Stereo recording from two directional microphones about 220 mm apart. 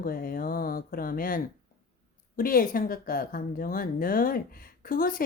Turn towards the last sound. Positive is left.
turn(degrees=40)  # may be behind; listen again after turning